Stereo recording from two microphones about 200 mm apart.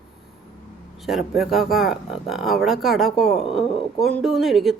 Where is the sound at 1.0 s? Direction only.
Centre (ahead or behind).